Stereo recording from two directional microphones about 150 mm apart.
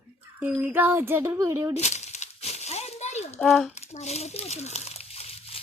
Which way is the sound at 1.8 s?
50° left (ahead or behind).